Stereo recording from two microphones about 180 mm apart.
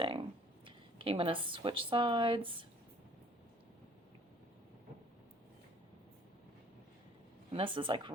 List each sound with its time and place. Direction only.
0.0 s speech: 30° right (ahead or behind)
7.5 s speech: 30° right (ahead or behind)